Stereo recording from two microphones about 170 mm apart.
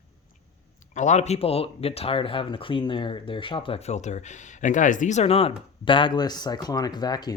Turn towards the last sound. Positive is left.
turn(degrees=25)  # may be behind; listen again after turning